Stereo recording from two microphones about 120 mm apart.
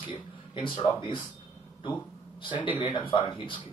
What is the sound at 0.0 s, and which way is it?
A man's voice, 45° left (ahead or behind).